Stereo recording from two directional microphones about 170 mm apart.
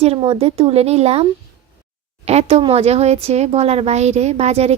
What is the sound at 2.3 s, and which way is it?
Speech, 35° right (ahead or behind).